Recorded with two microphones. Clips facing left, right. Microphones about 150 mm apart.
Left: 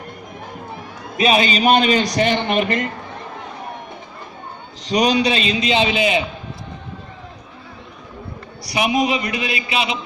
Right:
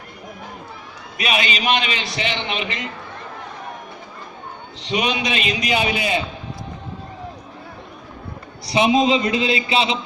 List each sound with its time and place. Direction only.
1.1 s a man's voice: 35° left (ahead or behind); by 2.9 s 50° left (ahead or behind)
4.8 s a man's voice: 40° left (ahead or behind); by 6.2 s 20° left (ahead or behind)
8.6 s a man's voice: 25° right (ahead or behind)